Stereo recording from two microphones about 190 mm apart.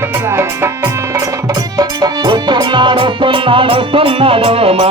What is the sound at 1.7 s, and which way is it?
Music, 20° right (ahead or behind).